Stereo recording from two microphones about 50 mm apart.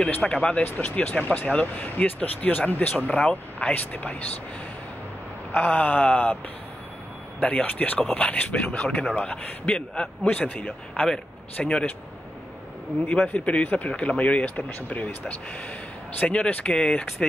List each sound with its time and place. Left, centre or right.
0.2 s a man's voice: centre
0.6 s speech: left
5.5 s speech: left
7.3 s a man's voice: left
10.2 s speech: left
11.6 s a man's voice: centre
13.1 s speech: left